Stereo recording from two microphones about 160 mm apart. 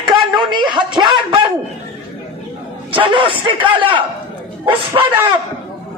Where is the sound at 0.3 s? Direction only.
30° right (ahead or behind).